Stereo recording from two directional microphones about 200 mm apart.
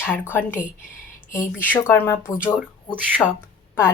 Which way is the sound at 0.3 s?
10° left (ahead or behind).